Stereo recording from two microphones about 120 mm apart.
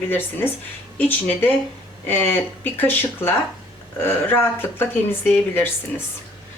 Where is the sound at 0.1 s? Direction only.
15° left (ahead or behind).